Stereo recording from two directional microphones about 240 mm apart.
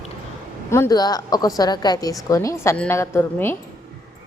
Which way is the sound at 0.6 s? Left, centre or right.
Centre.